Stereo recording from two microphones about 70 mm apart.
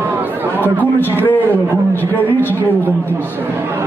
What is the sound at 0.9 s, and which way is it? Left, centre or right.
Speech, left.